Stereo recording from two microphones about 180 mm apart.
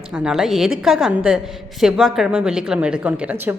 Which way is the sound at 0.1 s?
5° right (ahead or behind).